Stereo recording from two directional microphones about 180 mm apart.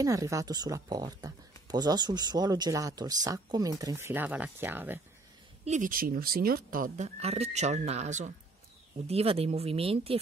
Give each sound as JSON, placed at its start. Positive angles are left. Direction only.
{"t": 0.0, "sound": "speech", "side_deg": -20}
{"t": 5.7, "sound": "speech", "side_deg": -50}
{"t": 7.2, "sound": "speech", "side_deg": -35}